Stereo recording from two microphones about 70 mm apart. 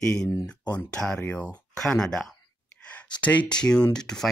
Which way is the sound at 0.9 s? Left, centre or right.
Centre.